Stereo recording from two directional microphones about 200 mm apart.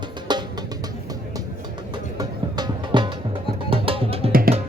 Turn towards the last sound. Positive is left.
turn(degrees=-45)  # may be behind; listen again after turning